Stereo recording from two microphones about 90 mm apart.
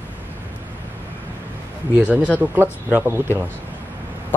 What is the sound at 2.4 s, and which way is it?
Speech, 20° right (ahead or behind).